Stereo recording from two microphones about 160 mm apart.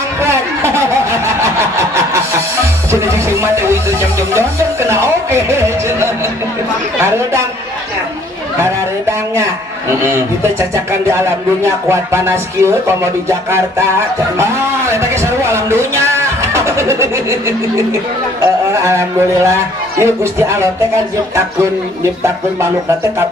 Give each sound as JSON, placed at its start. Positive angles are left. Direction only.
{"t": 0.2, "sound": "vehicle", "side_deg": -15}
{"t": 7.0, "sound": "a man's voice", "side_deg": -15}
{"t": 8.5, "sound": "a sound", "side_deg": -15}
{"t": 9.8, "sound": "a man's voice", "side_deg": -15}
{"t": 22.0, "sound": "a man's voice", "side_deg": -15}